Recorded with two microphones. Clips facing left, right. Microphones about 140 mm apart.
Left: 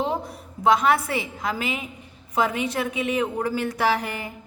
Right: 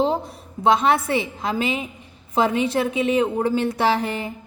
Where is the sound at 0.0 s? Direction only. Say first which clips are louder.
Right 5 dB; 30° right (ahead or behind).